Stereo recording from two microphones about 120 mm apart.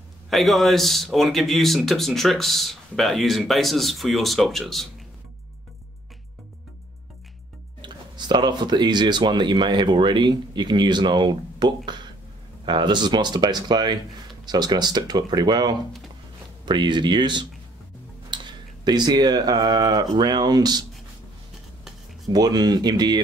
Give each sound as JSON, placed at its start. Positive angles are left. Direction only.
{"t": 0.3, "sound": "speech", "side_deg": 0}
{"t": 7.8, "sound": "speech", "side_deg": -40}
{"t": 22.3, "sound": "speech", "side_deg": -35}